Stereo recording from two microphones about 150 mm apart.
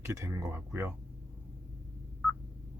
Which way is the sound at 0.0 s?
20° right (ahead or behind).